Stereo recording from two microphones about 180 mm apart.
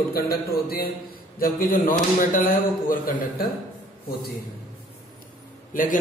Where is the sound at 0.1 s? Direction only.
55° left (ahead or behind).